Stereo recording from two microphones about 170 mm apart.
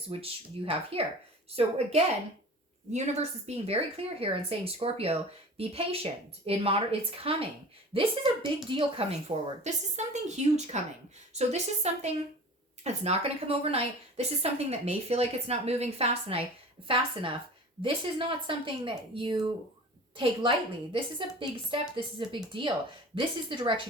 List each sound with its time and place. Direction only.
0.1 s a woman's voice: 35° right (ahead or behind)
20.9 s speech: 30° right (ahead or behind)